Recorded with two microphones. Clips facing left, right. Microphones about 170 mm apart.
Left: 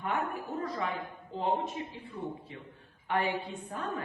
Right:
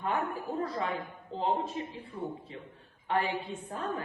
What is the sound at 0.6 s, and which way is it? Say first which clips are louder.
A woman's voice: right 1 dB; 30° right (ahead or behind).